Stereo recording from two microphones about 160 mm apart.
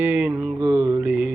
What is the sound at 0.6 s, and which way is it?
Mantra, 25° right (ahead or behind).